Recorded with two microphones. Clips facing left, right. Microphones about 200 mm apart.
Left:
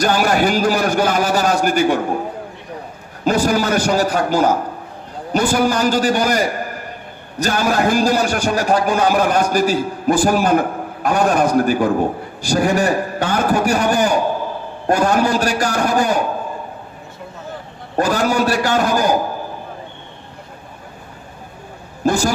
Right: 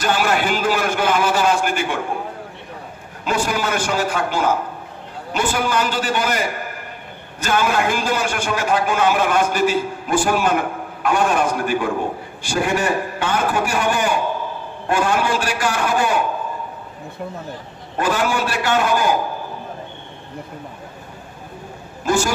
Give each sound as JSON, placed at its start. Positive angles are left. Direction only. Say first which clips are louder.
{"t": 0.0, "sound": "a man's voice", "louder": "left 4 dB", "side_deg": 40}
{"t": 3.3, "sound": "a man's voice", "louder": "left 5 dB", "side_deg": 40}
{"t": 17.9, "sound": "a man's voice", "louder": "left 3 dB", "side_deg": 40}
{"t": 22.0, "sound": "a man's voice", "louder": "left 2 dB", "side_deg": 40}